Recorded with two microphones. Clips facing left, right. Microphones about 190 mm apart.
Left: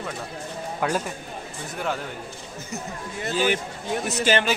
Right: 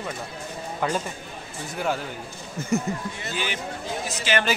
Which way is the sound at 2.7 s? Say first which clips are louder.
Right 10 dB; 55° right (ahead or behind).